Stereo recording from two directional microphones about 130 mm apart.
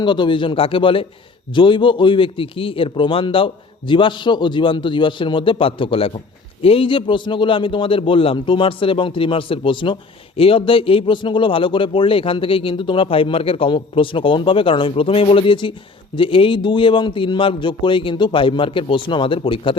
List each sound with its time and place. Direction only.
0.0 s a man's voice: 35° left (ahead or behind)